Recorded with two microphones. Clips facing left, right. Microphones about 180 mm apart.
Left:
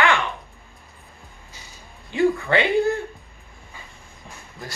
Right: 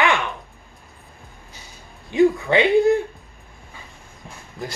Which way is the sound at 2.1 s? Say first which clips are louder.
Right 3 dB; 15° right (ahead or behind).